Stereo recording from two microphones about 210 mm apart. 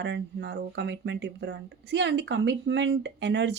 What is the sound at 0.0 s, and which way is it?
Speech, 55° right (ahead or behind).